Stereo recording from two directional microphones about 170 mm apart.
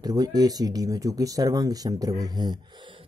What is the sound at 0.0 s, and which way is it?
Speech, 20° right (ahead or behind).